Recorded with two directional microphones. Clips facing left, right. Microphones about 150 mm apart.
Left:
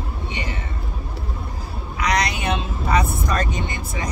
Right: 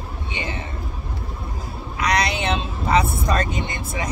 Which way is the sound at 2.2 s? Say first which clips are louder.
Right 1 dB; 25° right (ahead or behind).